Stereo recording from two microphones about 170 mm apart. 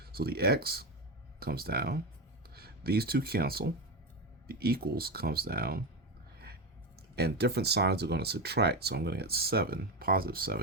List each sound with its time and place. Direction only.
0.0 s speech: 65° right (ahead or behind)
7.2 s speech: 75° right (ahead or behind)